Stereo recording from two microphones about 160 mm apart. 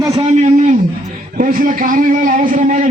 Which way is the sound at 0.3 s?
50° right (ahead or behind).